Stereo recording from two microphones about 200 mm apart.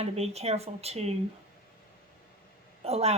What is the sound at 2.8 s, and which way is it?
Speech, 30° right (ahead or behind).